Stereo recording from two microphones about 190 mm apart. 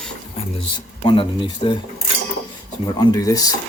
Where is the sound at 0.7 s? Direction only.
25° left (ahead or behind).